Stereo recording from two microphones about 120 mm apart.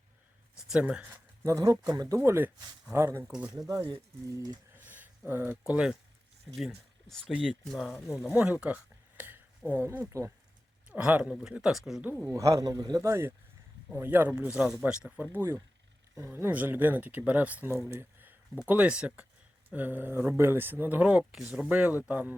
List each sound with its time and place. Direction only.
0.7 s speech: 5° right (ahead or behind)
1.5 s speech: 30° right (ahead or behind)
12.3 s speech: 25° right (ahead or behind)